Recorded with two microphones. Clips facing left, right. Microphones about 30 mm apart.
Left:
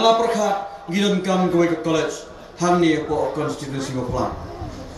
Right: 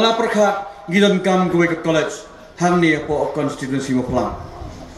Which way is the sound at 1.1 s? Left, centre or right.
Right.